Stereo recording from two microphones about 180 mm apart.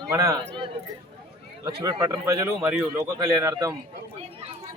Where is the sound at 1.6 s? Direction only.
20° right (ahead or behind).